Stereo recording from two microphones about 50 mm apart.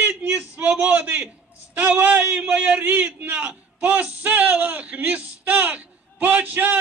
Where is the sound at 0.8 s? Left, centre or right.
Right.